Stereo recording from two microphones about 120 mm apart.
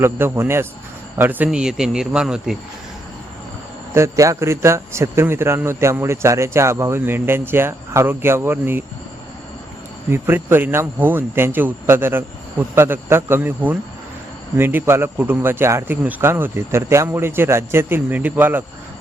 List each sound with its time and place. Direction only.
0.0 s a man's voice: 20° right (ahead or behind)
3.9 s a man's voice: 25° right (ahead or behind)
10.1 s a man's voice: 20° right (ahead or behind)